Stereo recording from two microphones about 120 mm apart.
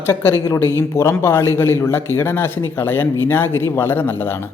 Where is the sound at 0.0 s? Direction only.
20° left (ahead or behind).